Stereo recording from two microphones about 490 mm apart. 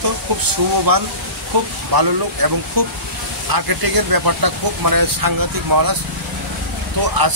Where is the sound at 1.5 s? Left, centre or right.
Right.